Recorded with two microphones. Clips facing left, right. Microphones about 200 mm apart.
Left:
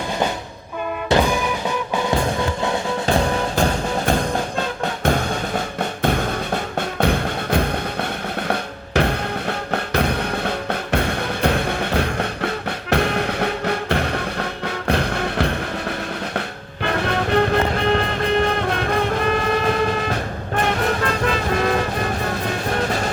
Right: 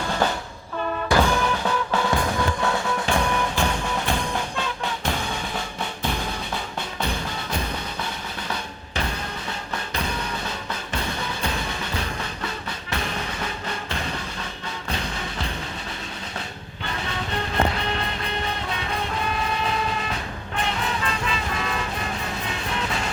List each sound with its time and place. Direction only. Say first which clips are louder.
1.1 s music: left 3 dB; 15° left (ahead or behind)
3.1 s music: left 5 dB; 35° left (ahead or behind)
6.0 s music: left 8 dB; 60° left (ahead or behind)
16.8 s music: left 10 dB; 65° left (ahead or behind)
18.4 s train: left 9 dB; 60° left (ahead or behind)
20.6 s vehicle: left 7 dB; 65° left (ahead or behind); by 23.1 s 40° left (ahead or behind)